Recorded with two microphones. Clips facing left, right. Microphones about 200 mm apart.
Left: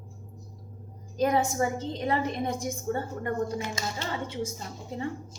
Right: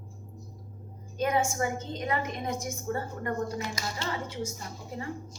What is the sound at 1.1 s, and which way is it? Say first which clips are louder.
A woman's voice: left 3 dB; 35° left (ahead or behind).